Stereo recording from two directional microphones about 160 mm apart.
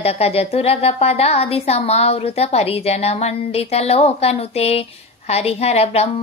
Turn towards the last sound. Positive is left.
turn(degrees=40)  # may be behind; listen again after turning